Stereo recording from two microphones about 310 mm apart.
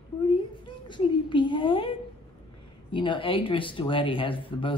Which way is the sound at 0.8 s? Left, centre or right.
Centre.